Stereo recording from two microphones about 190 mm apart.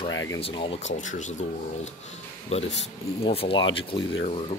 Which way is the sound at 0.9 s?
40° left (ahead or behind).